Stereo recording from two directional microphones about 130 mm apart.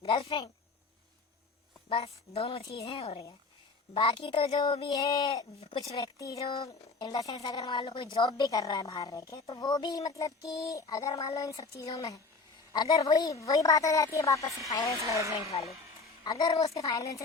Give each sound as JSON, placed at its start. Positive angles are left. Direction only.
{"t": 0.0, "sound": "a woman's voice", "side_deg": 45}
{"t": 2.3, "sound": "a woman's voice", "side_deg": 50}
{"t": 5.5, "sound": "a woman's voice", "side_deg": 45}
{"t": 6.0, "sound": "a woman's voice", "side_deg": 30}
{"t": 15.0, "sound": "speech", "side_deg": -25}
{"t": 16.2, "sound": "a woman's voice", "side_deg": 30}
{"t": 16.5, "sound": "a woman's voice", "side_deg": 50}
{"t": 16.8, "sound": "a woman's voice", "side_deg": 25}